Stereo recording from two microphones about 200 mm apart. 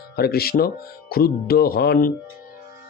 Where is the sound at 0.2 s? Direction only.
50° left (ahead or behind).